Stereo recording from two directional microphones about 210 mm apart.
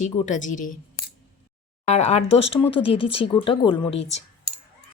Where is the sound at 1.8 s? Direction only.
30° left (ahead or behind).